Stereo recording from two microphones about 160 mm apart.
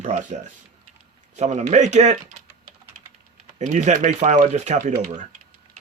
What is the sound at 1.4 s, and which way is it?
Speech, 50° right (ahead or behind).